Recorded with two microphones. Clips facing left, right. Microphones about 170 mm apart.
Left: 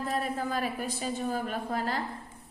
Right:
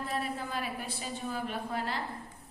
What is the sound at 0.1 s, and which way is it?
A woman's voice, 45° left (ahead or behind).